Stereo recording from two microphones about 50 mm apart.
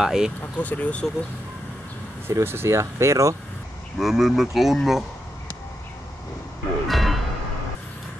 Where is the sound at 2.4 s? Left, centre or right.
Right.